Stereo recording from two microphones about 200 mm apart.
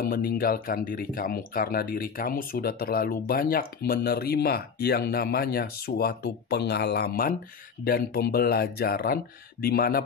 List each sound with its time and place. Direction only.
0.0 s speech: 50° left (ahead or behind)